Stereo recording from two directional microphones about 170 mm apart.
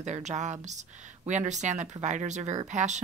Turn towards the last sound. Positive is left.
turn(degrees=-45)  # may be behind; listen again after turning